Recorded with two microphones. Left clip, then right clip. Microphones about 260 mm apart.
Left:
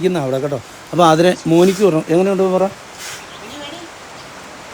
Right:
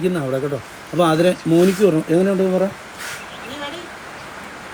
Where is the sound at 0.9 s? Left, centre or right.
Left.